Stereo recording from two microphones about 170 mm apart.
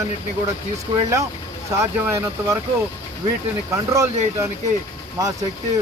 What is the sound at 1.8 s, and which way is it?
Speech, 15° right (ahead or behind).